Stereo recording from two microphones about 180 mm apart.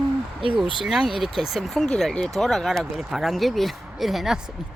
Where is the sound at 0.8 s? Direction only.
Centre (ahead or behind).